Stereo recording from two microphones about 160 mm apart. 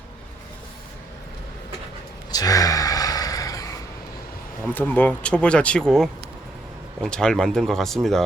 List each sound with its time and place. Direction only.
2.3 s gasp: 20° left (ahead or behind)
4.6 s speech: 10° left (ahead or behind)